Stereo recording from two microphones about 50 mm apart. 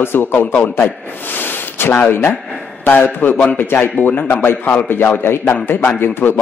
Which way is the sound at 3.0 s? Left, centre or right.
Left.